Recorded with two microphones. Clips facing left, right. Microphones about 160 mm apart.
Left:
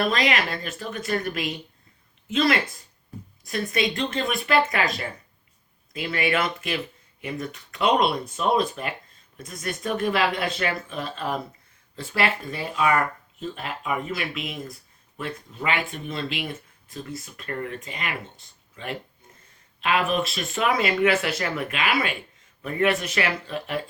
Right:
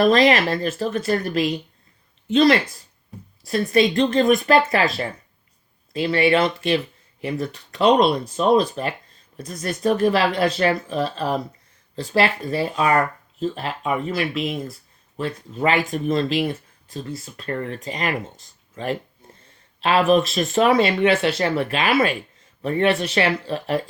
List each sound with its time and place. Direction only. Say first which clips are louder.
0.0 s speech: right 8 dB; 40° right (ahead or behind)
5.9 s speech: right 7 dB; 30° right (ahead or behind)